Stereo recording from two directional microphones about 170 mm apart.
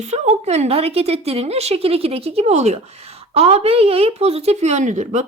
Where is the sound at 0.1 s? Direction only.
40° right (ahead or behind).